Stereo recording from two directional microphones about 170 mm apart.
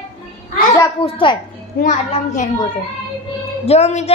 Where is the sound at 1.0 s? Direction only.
30° left (ahead or behind).